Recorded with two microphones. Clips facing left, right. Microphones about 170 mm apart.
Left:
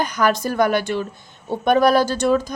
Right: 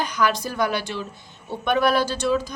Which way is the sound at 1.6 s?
40° left (ahead or behind).